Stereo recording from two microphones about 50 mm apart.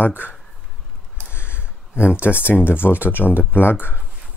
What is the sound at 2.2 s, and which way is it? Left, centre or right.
Speech, left.